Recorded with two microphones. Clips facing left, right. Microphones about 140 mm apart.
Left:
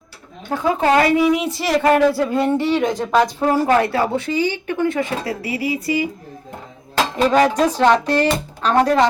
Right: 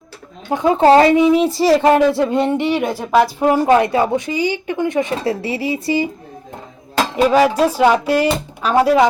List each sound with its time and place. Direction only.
0.5 s speech: 20° right (ahead or behind); by 3.2 s 5° right (ahead or behind)
3.4 s speech: 20° right (ahead or behind)
7.2 s speech: 10° right (ahead or behind)